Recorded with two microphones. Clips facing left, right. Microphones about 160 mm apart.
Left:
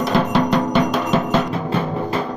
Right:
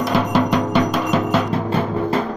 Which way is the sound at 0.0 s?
10° right (ahead or behind).